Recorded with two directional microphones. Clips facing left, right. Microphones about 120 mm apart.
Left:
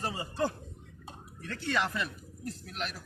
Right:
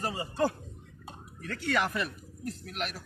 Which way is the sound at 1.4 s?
30° left (ahead or behind).